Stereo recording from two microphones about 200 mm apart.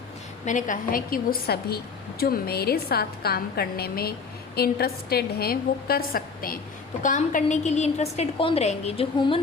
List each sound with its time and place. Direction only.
0.4 s a woman's voice: 40° left (ahead or behind)